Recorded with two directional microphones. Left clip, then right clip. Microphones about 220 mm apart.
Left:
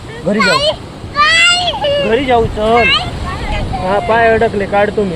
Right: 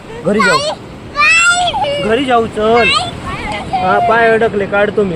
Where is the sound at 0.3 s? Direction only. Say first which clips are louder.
Left 1 dB; 25° right (ahead or behind).